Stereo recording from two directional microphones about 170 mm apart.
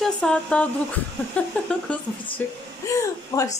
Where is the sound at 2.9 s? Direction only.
20° left (ahead or behind).